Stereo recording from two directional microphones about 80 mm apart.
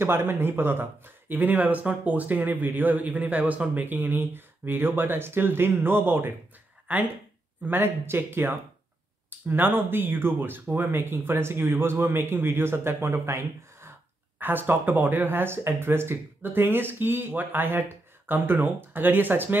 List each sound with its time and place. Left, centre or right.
0.0 s speech: right
7.6 s speech: right
14.4 s speech: right